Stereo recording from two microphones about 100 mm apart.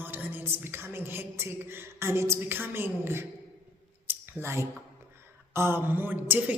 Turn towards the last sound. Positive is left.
turn(degrees=-20)  # may be behind; listen again after turning